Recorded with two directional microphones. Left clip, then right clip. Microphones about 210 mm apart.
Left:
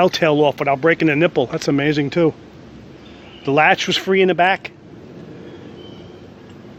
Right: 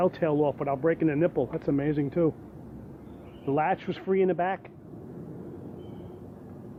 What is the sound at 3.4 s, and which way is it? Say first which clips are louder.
Speech: left 13 dB; 55° left (ahead or behind).